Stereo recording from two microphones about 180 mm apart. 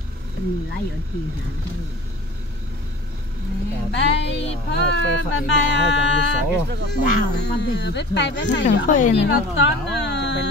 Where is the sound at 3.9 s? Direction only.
75° left (ahead or behind).